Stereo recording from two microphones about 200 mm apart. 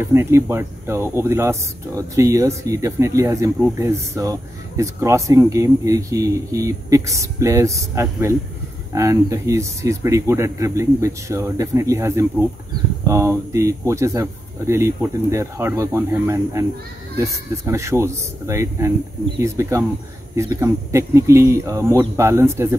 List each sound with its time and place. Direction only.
0.0 s speech: 15° right (ahead or behind)
17.6 s speech: 15° right (ahead or behind)